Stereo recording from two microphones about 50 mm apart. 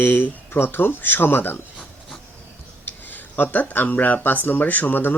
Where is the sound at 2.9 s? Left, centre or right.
Left.